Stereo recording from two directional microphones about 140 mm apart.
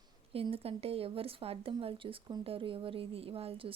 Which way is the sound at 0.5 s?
45° right (ahead or behind).